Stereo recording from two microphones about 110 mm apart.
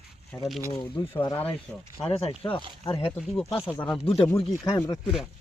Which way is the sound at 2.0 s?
60° left (ahead or behind).